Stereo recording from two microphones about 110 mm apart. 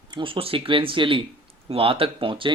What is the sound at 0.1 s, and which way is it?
Speech, 50° right (ahead or behind).